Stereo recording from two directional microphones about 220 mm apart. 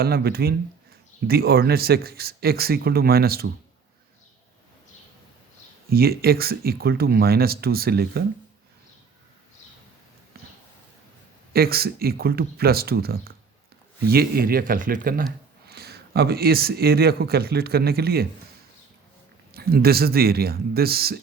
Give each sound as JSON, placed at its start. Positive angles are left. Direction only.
{"t": 0.0, "sound": "speech", "side_deg": -45}
{"t": 5.9, "sound": "speech", "side_deg": -45}
{"t": 10.3, "sound": "a sound", "side_deg": -45}
{"t": 11.5, "sound": "speech", "side_deg": -45}
{"t": 19.5, "sound": "speech", "side_deg": -45}